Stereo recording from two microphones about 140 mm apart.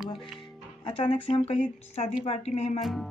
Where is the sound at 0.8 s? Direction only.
35° left (ahead or behind).